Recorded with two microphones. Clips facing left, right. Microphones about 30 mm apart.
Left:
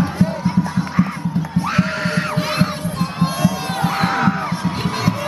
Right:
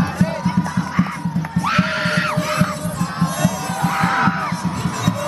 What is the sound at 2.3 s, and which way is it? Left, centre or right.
Heart sounds, left.